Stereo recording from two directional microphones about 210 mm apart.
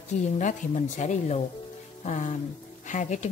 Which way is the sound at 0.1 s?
35° left (ahead or behind).